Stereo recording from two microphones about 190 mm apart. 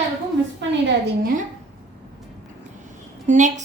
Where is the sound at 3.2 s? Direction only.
40° right (ahead or behind).